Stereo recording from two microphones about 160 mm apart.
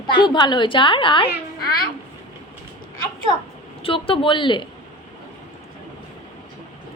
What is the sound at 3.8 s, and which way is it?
Speech, 35° left (ahead or behind).